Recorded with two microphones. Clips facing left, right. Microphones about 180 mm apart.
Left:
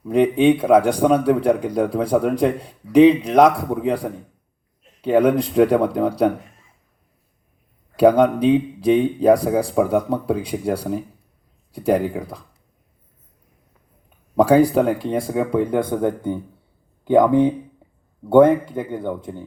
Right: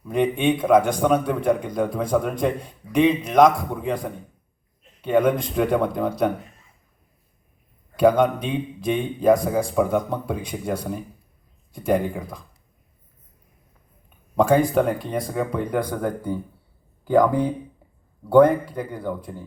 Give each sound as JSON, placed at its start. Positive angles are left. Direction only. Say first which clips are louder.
{"t": 0.1, "sound": "speech", "louder": "left 6 dB", "side_deg": 35}
{"t": 7.9, "sound": "speech", "louder": "left 3 dB", "side_deg": 35}
{"t": 14.3, "sound": "speech", "louder": "left 4 dB", "side_deg": 35}